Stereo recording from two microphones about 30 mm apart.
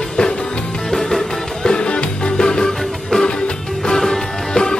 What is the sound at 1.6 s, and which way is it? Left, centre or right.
Music, left.